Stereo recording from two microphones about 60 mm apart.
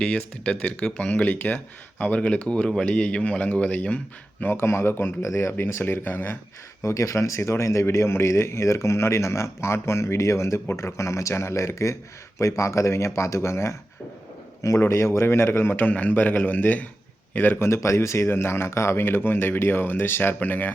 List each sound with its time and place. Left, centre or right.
0.0 s a man's voice: centre
4.4 s speech: left
6.8 s speech: left
14.8 s speech: left
17.7 s speech: left